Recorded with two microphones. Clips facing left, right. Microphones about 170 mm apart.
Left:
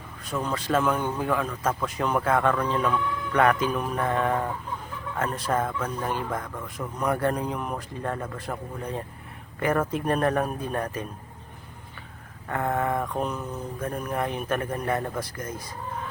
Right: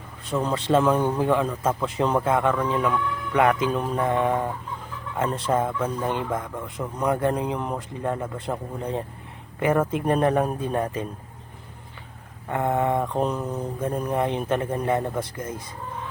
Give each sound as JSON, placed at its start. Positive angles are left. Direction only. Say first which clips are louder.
{"t": 0.4, "sound": "speech", "louder": "right 4 dB", "side_deg": -25}
{"t": 12.5, "sound": "speech", "louder": "right 3 dB", "side_deg": -15}
{"t": 13.8, "sound": "speech", "louder": "right 4 dB", "side_deg": -20}